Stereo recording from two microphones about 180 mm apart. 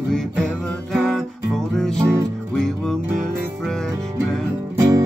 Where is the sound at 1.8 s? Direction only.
5° left (ahead or behind).